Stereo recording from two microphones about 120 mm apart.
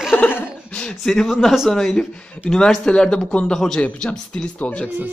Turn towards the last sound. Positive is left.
turn(degrees=10)  # may be behind; listen again after turning